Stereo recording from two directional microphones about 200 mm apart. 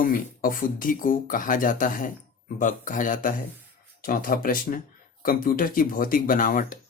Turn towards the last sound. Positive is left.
turn(degrees=40)  # may be behind; listen again after turning